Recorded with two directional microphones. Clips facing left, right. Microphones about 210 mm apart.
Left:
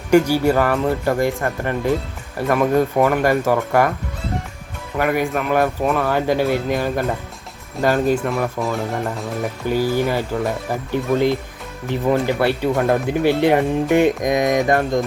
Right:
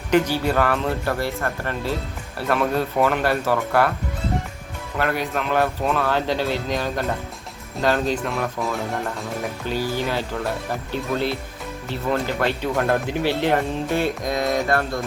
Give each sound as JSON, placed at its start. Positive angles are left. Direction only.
{"t": 0.1, "sound": "a man's voice", "side_deg": 10}
{"t": 4.9, "sound": "a man's voice", "side_deg": 10}
{"t": 9.6, "sound": "a man's voice", "side_deg": 10}